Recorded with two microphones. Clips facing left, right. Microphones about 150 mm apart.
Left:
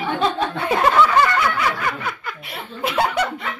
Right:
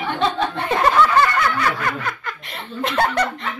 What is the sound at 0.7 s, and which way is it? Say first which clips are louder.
Snicker: left 1 dB; 10° left (ahead or behind).